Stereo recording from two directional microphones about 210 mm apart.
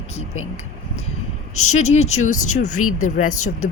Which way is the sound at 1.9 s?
30° left (ahead or behind).